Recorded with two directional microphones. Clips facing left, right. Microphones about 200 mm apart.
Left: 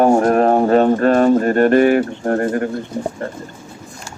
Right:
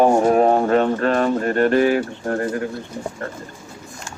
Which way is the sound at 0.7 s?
35° left (ahead or behind).